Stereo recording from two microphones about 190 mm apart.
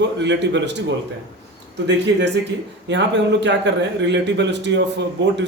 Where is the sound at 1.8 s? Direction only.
65° right (ahead or behind).